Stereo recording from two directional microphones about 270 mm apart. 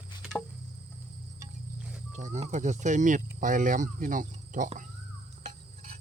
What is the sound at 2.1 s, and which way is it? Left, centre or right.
Speech, right.